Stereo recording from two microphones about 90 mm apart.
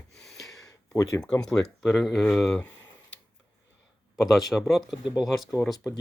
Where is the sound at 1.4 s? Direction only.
5° left (ahead or behind).